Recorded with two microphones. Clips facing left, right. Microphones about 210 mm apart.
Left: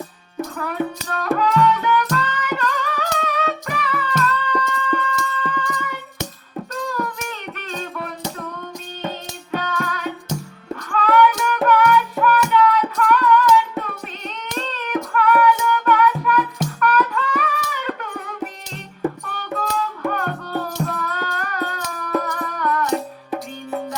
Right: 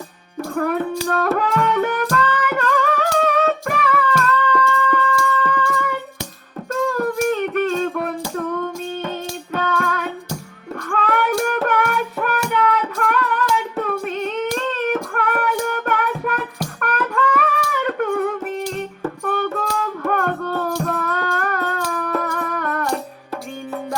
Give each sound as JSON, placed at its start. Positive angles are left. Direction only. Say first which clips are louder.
{"t": 0.5, "sound": "music", "louder": "right 6 dB", "side_deg": -50}
{"t": 4.7, "sound": "a sound", "louder": "right 3 dB", "side_deg": -45}
{"t": 5.2, "sound": "music", "louder": "right 5 dB", "side_deg": -45}
{"t": 6.8, "sound": "a sound", "louder": "right 10 dB", "side_deg": -45}
{"t": 8.4, "sound": "music", "louder": "right 8 dB", "side_deg": -45}
{"t": 14.7, "sound": "music", "louder": "right 3 dB", "side_deg": -50}
{"t": 17.5, "sound": "a sound", "louder": "right 4 dB", "side_deg": -50}
{"t": 19.8, "sound": "music", "louder": "right 3 dB", "side_deg": -50}
{"t": 22.1, "sound": "music", "louder": "left 4 dB", "side_deg": 35}
{"t": 22.4, "sound": "music", "louder": "left 1 dB", "side_deg": -50}